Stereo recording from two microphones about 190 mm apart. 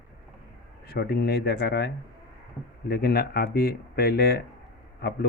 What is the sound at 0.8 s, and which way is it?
Speech, 55° left (ahead or behind).